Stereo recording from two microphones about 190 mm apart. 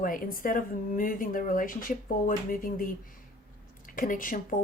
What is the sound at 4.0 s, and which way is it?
Speech, 45° left (ahead or behind).